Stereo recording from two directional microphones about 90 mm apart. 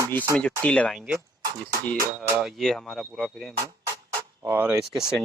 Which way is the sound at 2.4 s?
5° left (ahead or behind).